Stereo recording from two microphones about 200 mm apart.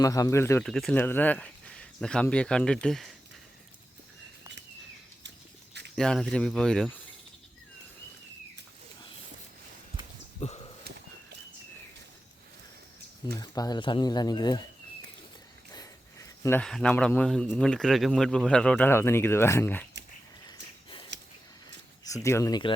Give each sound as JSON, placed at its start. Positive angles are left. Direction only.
{"t": 0.0, "sound": "speech", "side_deg": 15}
{"t": 0.6, "sound": "speech", "side_deg": 0}
{"t": 6.0, "sound": "speech", "side_deg": 0}
{"t": 13.3, "sound": "speech", "side_deg": 20}
{"t": 15.7, "sound": "speech", "side_deg": 15}
{"t": 22.0, "sound": "speech", "side_deg": 15}